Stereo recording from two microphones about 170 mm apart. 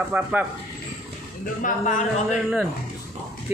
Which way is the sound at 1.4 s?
50° left (ahead or behind).